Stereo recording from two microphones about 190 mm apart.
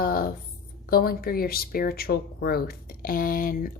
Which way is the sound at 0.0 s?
50° left (ahead or behind).